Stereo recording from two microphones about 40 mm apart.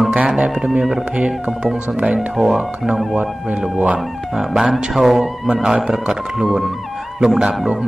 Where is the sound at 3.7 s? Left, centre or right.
Right.